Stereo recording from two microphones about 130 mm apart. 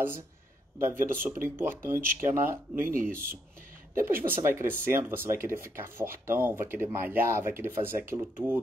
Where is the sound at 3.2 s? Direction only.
90° right.